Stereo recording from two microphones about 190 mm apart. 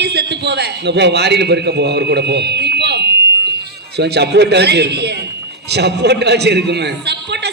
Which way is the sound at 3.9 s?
60° right (ahead or behind).